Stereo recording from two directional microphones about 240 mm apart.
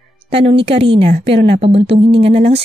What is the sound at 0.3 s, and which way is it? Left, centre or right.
A woman's voice, right.